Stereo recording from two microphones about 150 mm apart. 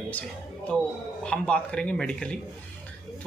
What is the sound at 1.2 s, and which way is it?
A man's voice, 5° left (ahead or behind).